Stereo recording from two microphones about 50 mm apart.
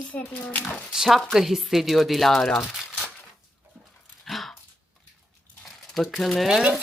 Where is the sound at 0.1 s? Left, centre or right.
Left.